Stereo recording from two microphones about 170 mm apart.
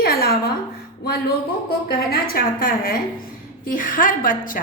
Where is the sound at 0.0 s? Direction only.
60° left (ahead or behind).